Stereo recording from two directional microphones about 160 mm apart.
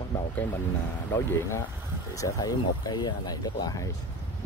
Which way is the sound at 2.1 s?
20° left (ahead or behind).